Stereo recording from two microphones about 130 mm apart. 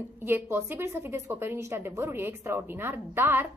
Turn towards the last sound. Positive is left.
turn(degrees=-15)  # may be behind; listen again after turning